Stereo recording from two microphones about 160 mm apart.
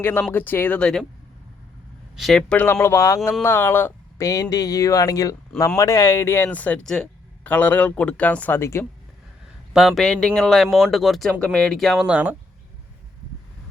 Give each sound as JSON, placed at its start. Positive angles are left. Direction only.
{"t": 0.0, "sound": "speech", "side_deg": 10}
{"t": 2.1, "sound": "speech", "side_deg": 0}
{"t": 9.7, "sound": "speech", "side_deg": 0}